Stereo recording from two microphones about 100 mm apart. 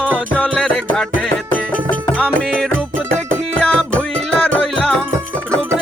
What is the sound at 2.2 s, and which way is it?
Music, 10° left (ahead or behind).